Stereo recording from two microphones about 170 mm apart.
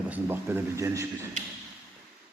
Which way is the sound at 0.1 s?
15° right (ahead or behind).